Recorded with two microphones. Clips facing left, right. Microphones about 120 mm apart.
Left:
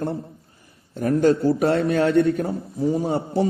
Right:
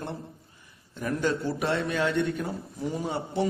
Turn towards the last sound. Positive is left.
turn(degrees=30)  # may be behind; listen again after turning